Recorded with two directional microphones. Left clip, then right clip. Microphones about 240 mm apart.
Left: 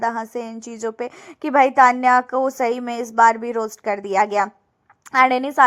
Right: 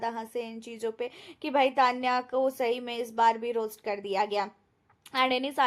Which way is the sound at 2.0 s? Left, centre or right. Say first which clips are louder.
Left 11 dB; left.